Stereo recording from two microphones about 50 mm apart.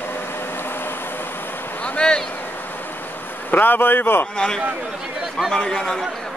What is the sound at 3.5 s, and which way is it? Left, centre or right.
Speech, left.